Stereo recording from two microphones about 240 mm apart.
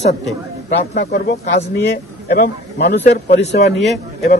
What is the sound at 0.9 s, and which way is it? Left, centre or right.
Speech, left.